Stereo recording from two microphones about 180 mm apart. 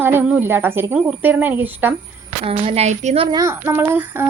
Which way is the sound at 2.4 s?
30° right (ahead or behind).